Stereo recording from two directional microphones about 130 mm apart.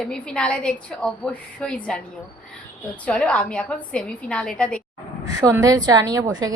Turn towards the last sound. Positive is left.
turn(degrees=-25)  # may be behind; listen again after turning